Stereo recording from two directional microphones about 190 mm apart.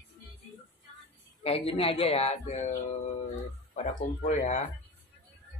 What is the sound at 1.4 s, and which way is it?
Speech, 30° left (ahead or behind).